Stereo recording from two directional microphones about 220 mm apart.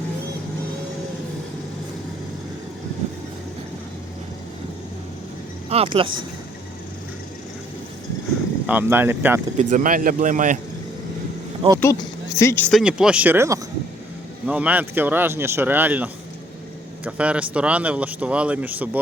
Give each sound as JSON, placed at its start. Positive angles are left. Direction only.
{"t": 5.6, "sound": "speech", "side_deg": -25}
{"t": 8.6, "sound": "speech", "side_deg": -10}
{"t": 9.6, "sound": "speech", "side_deg": -35}
{"t": 11.8, "sound": "speech", "side_deg": 15}
{"t": 12.8, "sound": "speech", "side_deg": -5}